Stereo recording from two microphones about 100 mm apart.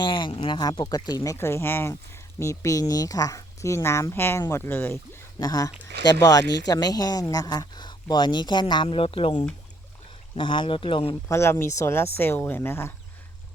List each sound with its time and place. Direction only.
0.0 s speech: 55° left (ahead or behind); by 4.9 s 25° left (ahead or behind)
5.4 s speech: 40° left (ahead or behind); by 9.3 s 65° left (ahead or behind)
10.3 s speech: 55° left (ahead or behind)
11.3 s speech: 25° left (ahead or behind)